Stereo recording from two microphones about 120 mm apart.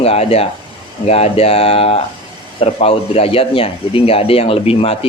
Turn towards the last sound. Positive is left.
turn(degrees=55)  # may be behind; listen again after turning